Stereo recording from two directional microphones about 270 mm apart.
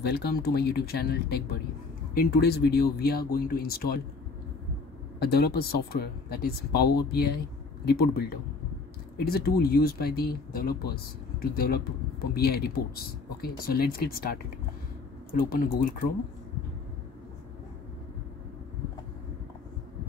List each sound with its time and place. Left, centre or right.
0.0 s speech: left
5.2 s speech: left